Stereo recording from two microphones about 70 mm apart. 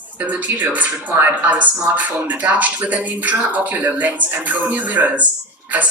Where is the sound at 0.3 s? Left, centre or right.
Right.